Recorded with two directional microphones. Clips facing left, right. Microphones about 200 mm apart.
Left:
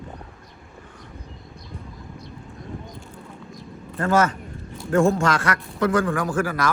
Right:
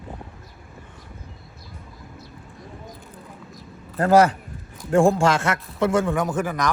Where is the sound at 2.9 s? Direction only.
Centre (ahead or behind).